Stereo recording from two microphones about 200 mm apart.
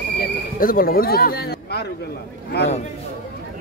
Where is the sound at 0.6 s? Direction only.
45° left (ahead or behind).